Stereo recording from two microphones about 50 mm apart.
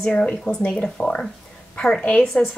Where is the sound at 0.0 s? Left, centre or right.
Centre.